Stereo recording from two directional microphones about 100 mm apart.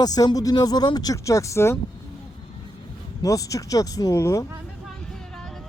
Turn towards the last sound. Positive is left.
turn(degrees=30)  # may be behind; listen again after turning